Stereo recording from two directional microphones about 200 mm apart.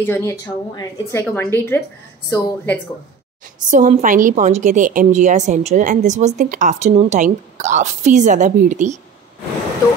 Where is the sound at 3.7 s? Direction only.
40° right (ahead or behind).